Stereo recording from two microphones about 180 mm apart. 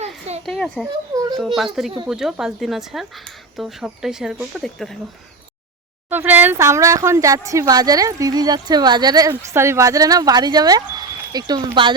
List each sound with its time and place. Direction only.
0.4 s speech: centre (ahead or behind)
1.1 s a sound: 20° right (ahead or behind)
1.4 s speech: centre (ahead or behind)
6.1 s speech: 10° right (ahead or behind); by 11.9 s 25° right (ahead or behind)